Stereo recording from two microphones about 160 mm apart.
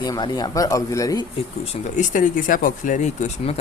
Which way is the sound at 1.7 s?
50° left (ahead or behind).